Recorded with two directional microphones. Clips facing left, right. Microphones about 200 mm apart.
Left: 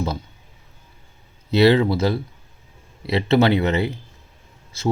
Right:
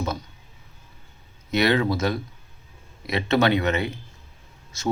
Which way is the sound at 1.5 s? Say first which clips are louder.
Left 6 dB; 30° left (ahead or behind).